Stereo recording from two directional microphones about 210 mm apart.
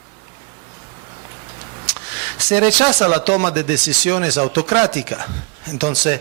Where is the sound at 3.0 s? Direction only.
10° right (ahead or behind).